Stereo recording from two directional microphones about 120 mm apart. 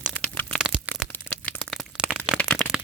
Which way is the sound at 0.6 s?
10° right (ahead or behind).